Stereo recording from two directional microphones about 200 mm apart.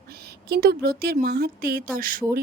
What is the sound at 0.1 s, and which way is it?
Speech, 50° right (ahead or behind).